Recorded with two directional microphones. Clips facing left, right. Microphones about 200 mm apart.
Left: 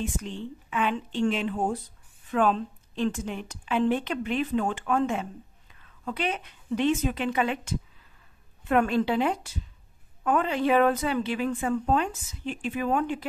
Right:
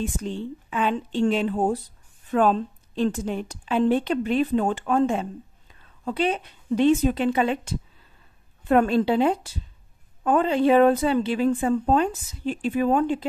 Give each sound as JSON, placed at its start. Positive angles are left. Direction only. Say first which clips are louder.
{"t": 0.2, "sound": "a woman's voice", "louder": "right 5 dB", "side_deg": -35}